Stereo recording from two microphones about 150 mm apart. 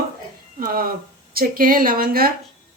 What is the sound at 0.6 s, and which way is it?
A woman's voice, 75° right (ahead or behind).